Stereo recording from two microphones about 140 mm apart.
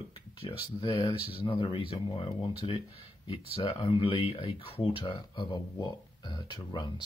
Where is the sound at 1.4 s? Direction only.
35° left (ahead or behind).